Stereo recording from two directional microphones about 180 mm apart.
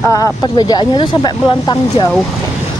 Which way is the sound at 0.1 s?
20° left (ahead or behind).